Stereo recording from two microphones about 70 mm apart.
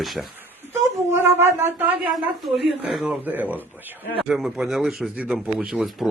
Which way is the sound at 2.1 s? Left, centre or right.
Centre.